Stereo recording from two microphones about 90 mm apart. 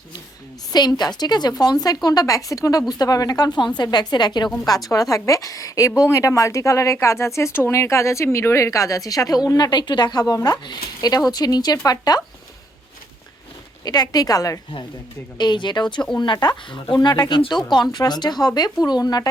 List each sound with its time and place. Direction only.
0.7 s speech: 50° left (ahead or behind)
13.8 s speech: 45° left (ahead or behind)
15.4 s speech: 55° left (ahead or behind)